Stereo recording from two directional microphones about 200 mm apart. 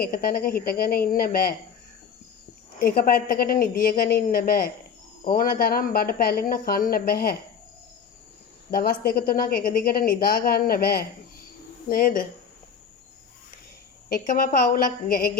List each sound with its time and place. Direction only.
0.0 s speech: 45° left (ahead or behind)
2.8 s speech: 50° left (ahead or behind)
8.7 s speech: 45° left (ahead or behind)
14.1 s speech: 45° left (ahead or behind)